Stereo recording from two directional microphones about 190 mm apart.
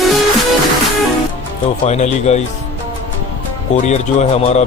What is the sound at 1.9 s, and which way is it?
Speech, 35° left (ahead or behind).